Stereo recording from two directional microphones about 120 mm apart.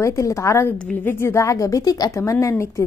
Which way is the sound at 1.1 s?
20° left (ahead or behind).